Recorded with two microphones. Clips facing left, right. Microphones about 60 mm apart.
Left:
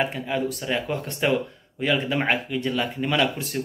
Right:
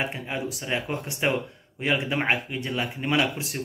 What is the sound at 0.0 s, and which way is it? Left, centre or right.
A man's voice, centre.